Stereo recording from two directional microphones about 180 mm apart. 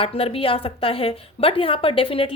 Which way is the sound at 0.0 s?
30° left (ahead or behind).